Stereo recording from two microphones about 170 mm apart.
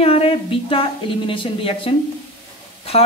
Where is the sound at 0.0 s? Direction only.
35° left (ahead or behind).